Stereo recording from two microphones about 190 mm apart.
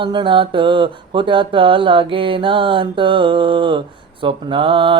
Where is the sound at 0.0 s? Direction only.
25° right (ahead or behind).